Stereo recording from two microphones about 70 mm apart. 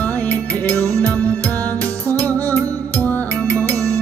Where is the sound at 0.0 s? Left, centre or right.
Left.